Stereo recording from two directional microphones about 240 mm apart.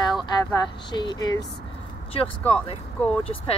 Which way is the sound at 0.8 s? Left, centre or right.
Centre.